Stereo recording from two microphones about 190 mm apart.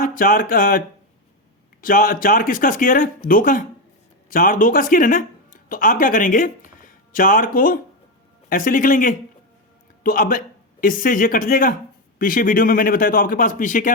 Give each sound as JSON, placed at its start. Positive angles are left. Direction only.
{"t": 0.0, "sound": "speech", "side_deg": 45}
{"t": 1.8, "sound": "speech", "side_deg": 50}